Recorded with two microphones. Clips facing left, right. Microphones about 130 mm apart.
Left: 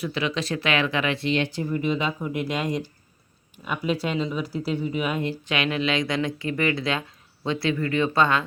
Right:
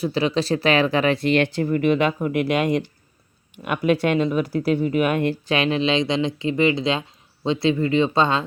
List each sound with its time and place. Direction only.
0.0 s speech: 35° right (ahead or behind)
1.3 s speech: 60° right (ahead or behind)
5.5 s speech: 30° right (ahead or behind)